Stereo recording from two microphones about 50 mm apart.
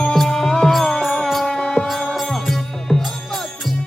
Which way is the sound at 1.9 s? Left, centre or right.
Centre.